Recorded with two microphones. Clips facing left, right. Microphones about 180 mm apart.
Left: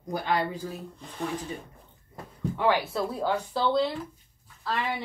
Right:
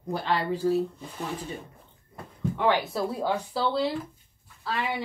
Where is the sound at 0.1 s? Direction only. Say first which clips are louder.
Right 1 dB; 35° right (ahead or behind).